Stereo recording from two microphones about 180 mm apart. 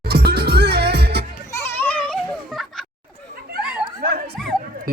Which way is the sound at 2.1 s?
Centre (ahead or behind).